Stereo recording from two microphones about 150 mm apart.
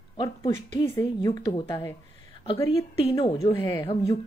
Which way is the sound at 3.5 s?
25° left (ahead or behind).